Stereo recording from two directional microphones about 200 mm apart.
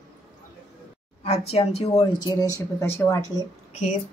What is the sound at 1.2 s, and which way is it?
Speech, 30° left (ahead or behind).